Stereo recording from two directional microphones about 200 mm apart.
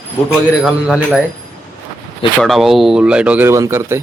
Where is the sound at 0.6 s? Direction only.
5° right (ahead or behind).